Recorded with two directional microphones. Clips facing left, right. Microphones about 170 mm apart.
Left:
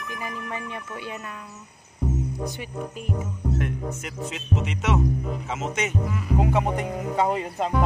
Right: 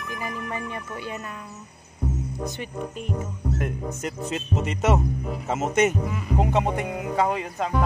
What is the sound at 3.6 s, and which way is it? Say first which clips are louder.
Speech: right 1 dB; 40° right (ahead or behind).